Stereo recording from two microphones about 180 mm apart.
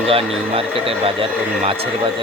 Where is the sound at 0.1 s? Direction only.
30° right (ahead or behind).